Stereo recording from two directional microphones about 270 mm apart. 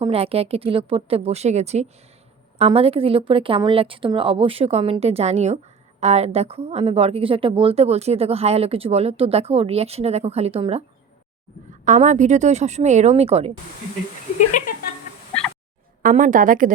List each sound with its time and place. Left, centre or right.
0.0 s speech: right
11.9 s speech: right
14.6 s a sound: left
16.0 s speech: right